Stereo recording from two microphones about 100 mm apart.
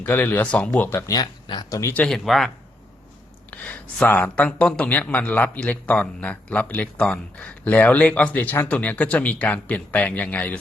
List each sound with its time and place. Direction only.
0.0 s speech: 20° left (ahead or behind)
0.9 s speech: 35° left (ahead or behind)
1.5 s speech: 50° left (ahead or behind)
2.0 s speech: 5° left (ahead or behind)
3.5 s speech: 15° left (ahead or behind)